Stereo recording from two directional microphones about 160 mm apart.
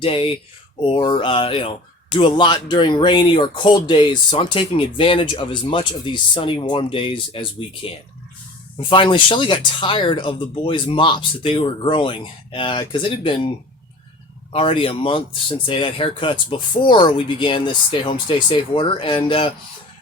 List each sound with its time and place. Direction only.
0.0 s speech: 35° left (ahead or behind)
14.5 s speech: 35° left (ahead or behind)